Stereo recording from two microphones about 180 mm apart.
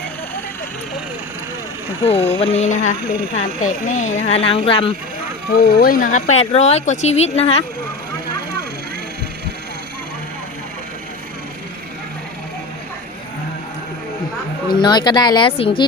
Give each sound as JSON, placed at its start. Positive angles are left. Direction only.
{"t": 2.1, "sound": "speech", "side_deg": 15}
{"t": 2.4, "sound": "speech", "side_deg": 40}
{"t": 5.5, "sound": "speech", "side_deg": 55}
{"t": 14.7, "sound": "speech", "side_deg": 25}